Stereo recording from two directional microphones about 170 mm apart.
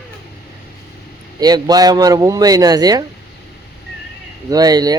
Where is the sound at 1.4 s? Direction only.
25° right (ahead or behind).